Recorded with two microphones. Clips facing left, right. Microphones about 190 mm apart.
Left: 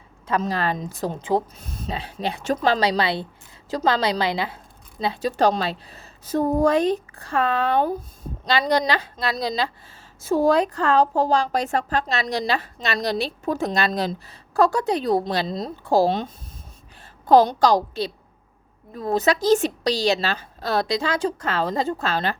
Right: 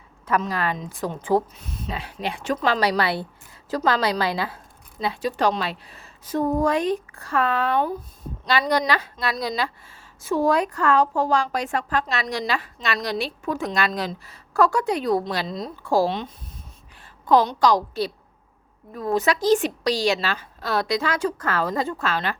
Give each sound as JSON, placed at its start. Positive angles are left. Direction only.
{"t": 0.3, "sound": "a woman's voice", "side_deg": 30}
{"t": 1.2, "sound": "a woman's voice", "side_deg": 20}